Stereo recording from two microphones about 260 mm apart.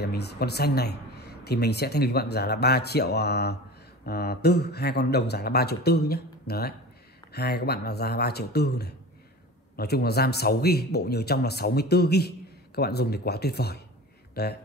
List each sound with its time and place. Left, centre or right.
0.0 s a man's voice: left